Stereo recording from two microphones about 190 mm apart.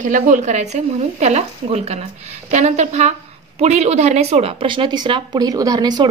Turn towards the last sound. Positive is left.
turn(degrees=-20)  # may be behind; listen again after turning